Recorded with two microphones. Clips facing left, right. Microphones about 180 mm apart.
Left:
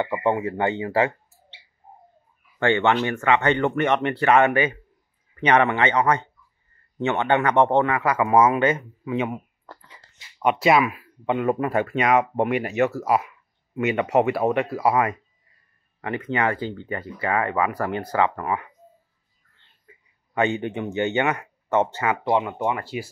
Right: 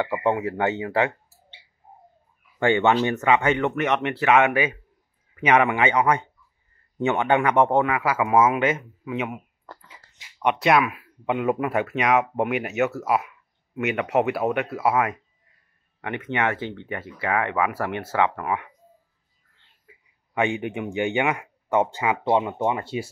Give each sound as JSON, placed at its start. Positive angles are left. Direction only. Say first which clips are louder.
{"t": 0.0, "sound": "speech", "louder": "even", "side_deg": -5}
{"t": 2.6, "sound": "speech", "louder": "right 1 dB", "side_deg": -15}
{"t": 19.9, "sound": "speech", "louder": "left 1 dB", "side_deg": -10}
{"t": 22.2, "sound": "speech", "louder": "right 2 dB", "side_deg": -25}